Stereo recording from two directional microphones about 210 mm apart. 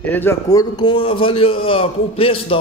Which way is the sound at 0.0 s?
10° left (ahead or behind).